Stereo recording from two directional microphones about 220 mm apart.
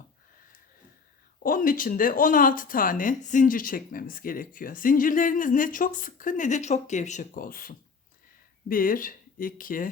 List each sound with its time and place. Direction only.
1.5 s speech: 40° left (ahead or behind)